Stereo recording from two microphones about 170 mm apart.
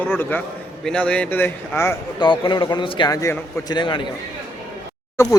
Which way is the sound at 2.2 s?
30° left (ahead or behind).